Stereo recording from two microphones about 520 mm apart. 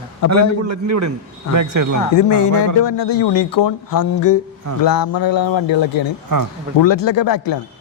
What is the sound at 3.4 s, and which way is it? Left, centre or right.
Speech, left.